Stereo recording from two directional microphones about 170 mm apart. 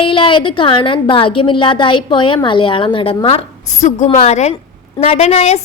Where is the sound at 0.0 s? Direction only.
30° left (ahead or behind).